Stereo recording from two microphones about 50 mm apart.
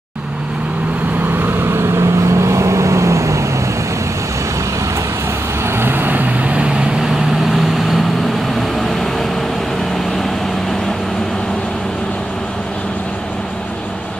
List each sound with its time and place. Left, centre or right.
1.3 s vehicle: right
5.8 s vehicle: right
7.0 s vehicle: centre